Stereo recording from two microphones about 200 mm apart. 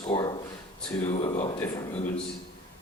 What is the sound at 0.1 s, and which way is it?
A man's voice, 25° left (ahead or behind).